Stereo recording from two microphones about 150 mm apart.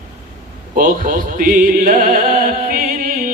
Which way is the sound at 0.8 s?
65° right (ahead or behind).